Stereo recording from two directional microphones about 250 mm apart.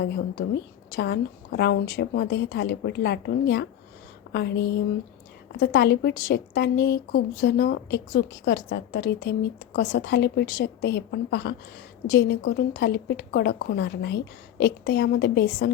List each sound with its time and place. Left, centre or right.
0.9 s a woman's voice: left